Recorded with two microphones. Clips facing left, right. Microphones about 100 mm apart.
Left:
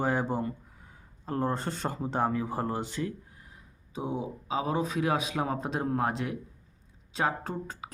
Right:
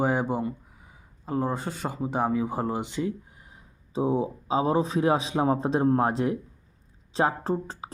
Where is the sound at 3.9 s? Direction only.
30° right (ahead or behind).